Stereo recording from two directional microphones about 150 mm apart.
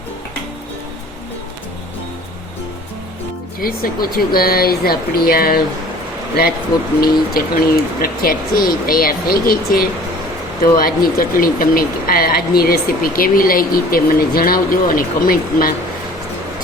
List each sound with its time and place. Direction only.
3.6 s speech: 75° left (ahead or behind)
7.0 s speech: 80° left